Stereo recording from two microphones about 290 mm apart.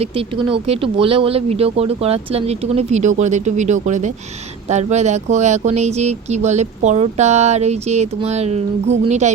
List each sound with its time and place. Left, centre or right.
0.0 s speech: centre